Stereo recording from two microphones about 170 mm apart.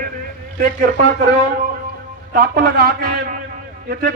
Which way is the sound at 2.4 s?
60° right (ahead or behind).